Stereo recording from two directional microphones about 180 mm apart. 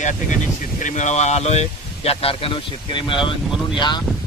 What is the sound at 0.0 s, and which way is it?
Speech, 45° left (ahead or behind).